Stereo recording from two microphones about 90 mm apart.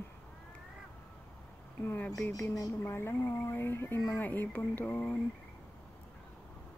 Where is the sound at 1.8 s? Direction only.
25° left (ahead or behind).